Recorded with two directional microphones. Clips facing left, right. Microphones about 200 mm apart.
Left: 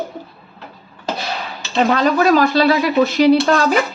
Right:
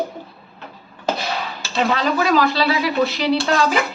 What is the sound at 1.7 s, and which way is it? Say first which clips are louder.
Speech: left 4 dB; 45° left (ahead or behind).